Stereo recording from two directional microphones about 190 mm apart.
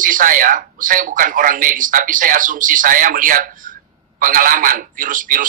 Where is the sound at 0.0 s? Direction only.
45° right (ahead or behind).